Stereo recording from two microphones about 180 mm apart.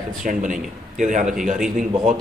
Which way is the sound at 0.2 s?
45° right (ahead or behind).